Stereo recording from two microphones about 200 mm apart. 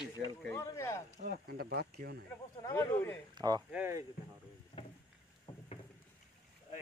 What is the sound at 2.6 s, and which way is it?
Speech, 15° left (ahead or behind).